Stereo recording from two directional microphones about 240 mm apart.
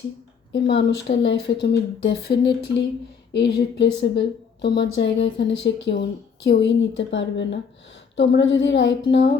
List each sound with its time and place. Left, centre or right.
0.5 s speech: left